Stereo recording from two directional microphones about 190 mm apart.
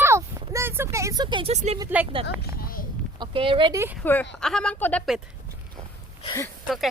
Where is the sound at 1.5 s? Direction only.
35° right (ahead or behind).